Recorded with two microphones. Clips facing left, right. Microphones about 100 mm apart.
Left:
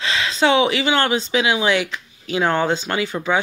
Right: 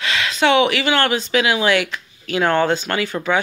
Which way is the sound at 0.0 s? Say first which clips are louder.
Even; 25° left (ahead or behind).